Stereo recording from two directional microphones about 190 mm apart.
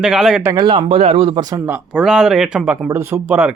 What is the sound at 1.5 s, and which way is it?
Speech, 10° right (ahead or behind).